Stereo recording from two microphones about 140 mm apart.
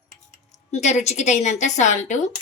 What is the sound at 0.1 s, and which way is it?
Speech, 55° left (ahead or behind).